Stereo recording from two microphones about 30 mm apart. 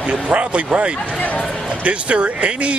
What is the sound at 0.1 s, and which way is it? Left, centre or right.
A man's voice, right.